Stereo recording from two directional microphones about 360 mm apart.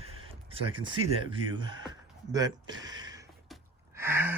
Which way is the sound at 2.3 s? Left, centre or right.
Centre.